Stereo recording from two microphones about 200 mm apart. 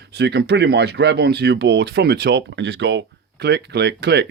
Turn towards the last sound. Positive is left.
turn(degrees=-55)  # may be behind; listen again after turning